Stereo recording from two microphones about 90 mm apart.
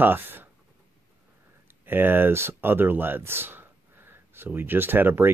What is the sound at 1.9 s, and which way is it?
Speech, 25° right (ahead or behind).